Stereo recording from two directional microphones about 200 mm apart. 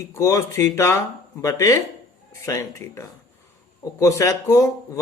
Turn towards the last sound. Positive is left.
turn(degrees=15)  # may be behind; listen again after turning